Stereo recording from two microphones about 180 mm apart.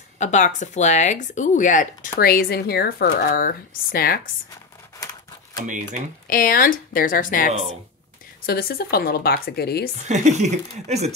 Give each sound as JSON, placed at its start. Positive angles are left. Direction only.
{"t": 0.2, "sound": "speech", "side_deg": 40}
{"t": 2.1, "sound": "speech", "side_deg": 60}
{"t": 6.2, "sound": "speech", "side_deg": 55}
{"t": 10.0, "sound": "speech", "side_deg": -40}